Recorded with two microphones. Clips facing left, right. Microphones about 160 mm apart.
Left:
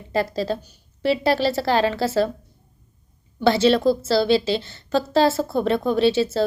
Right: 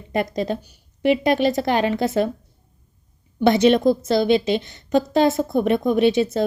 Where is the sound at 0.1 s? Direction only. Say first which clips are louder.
Even; 20° right (ahead or behind).